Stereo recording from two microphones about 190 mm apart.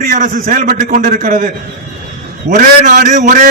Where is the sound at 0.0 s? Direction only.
45° right (ahead or behind).